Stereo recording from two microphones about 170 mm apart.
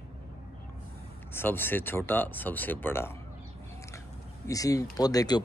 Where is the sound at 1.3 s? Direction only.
15° left (ahead or behind).